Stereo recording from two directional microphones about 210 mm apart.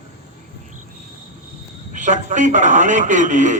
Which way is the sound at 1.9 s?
35° right (ahead or behind).